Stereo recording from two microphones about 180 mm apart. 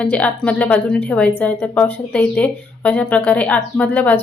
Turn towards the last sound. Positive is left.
turn(degrees=10)  # may be behind; listen again after turning